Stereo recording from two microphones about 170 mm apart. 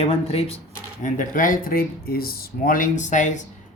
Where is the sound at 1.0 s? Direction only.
50° left (ahead or behind).